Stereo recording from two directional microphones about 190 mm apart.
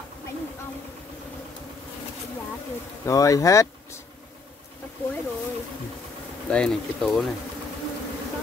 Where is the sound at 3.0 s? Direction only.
15° left (ahead or behind).